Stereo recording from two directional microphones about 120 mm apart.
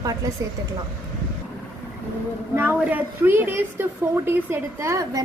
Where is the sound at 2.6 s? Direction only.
15° right (ahead or behind).